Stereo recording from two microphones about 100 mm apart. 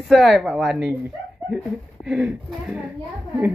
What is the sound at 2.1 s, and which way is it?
Mantra, 5° right (ahead or behind).